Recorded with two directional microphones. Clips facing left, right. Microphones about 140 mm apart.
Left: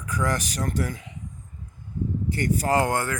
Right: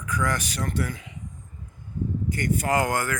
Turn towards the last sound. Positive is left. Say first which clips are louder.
# left 1 dB
turn(degrees=30)  # may be behind; listen again after turning